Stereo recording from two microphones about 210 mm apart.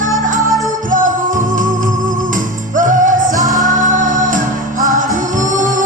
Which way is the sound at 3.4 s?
15° right (ahead or behind).